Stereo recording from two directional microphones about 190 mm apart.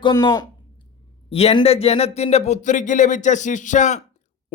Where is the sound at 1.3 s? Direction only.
30° left (ahead or behind).